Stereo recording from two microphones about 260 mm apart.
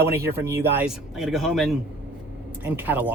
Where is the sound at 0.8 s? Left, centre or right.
Centre.